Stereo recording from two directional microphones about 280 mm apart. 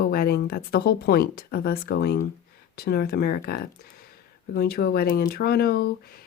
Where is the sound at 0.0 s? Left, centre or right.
Left.